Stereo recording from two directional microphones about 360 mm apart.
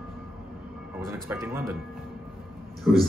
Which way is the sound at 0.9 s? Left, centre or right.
Centre.